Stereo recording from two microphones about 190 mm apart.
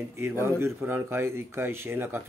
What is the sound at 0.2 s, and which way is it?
A man's voice, 15° right (ahead or behind).